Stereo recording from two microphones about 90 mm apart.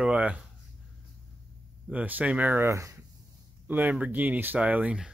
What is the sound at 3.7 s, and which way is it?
Speech, 20° right (ahead or behind).